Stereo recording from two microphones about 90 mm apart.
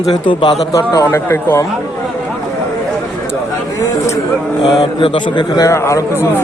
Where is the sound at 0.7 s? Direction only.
35° left (ahead or behind).